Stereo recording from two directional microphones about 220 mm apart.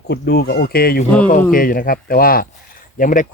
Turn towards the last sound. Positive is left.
turn(degrees=35)  # may be behind; listen again after turning